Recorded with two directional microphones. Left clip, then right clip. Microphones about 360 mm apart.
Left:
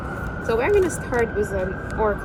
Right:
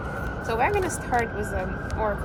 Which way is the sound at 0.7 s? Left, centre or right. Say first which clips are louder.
Left 4 dB; centre.